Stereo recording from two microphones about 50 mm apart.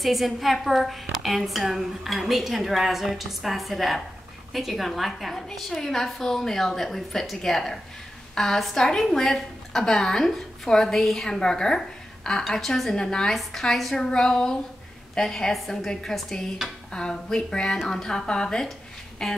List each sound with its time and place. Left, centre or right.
0.0 s a woman's voice: centre